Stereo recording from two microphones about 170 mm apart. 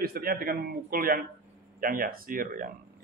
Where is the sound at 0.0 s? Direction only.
60° right (ahead or behind).